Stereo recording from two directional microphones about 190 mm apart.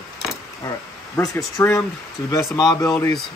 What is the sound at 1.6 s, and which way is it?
Speech, 15° left (ahead or behind).